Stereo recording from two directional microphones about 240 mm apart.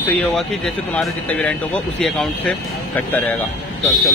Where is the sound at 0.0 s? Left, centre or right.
Centre.